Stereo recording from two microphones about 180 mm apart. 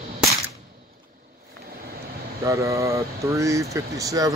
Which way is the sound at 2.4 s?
15° right (ahead or behind).